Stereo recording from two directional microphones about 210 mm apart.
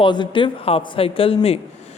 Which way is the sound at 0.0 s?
20° left (ahead or behind).